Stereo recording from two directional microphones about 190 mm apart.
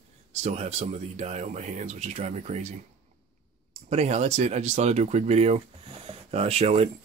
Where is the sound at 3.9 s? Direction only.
35° right (ahead or behind).